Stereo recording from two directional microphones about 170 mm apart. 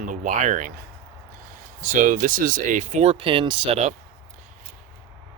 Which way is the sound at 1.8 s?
45° right (ahead or behind).